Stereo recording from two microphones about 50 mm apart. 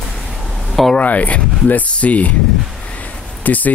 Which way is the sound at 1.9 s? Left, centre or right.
Left.